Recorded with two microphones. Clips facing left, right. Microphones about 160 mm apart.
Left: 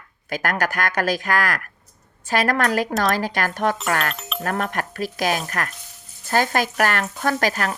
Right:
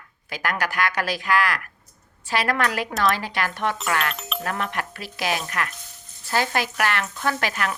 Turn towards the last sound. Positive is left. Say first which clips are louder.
# left 3 dB
turn(degrees=40)  # may be behind; listen again after turning